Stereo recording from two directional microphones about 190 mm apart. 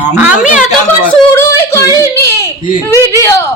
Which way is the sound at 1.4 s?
15° left (ahead or behind).